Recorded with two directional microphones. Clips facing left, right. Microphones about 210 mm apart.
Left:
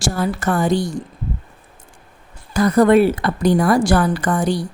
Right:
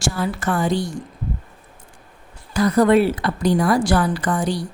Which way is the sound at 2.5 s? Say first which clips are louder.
Left 2 dB; 50° left (ahead or behind).